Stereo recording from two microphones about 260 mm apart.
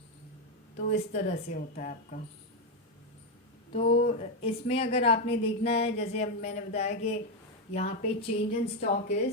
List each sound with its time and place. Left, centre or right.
0.9 s a woman's voice: left
3.7 s a woman's voice: left